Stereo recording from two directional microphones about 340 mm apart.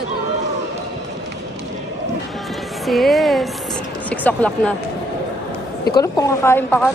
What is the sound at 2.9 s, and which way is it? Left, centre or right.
Speech, centre.